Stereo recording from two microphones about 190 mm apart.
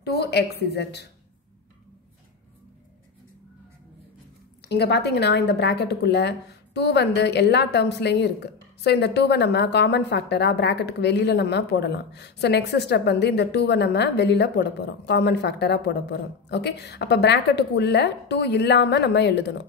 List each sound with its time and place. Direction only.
0.0 s a woman's voice: 60° left (ahead or behind)
4.6 s a woman's voice: 60° left (ahead or behind)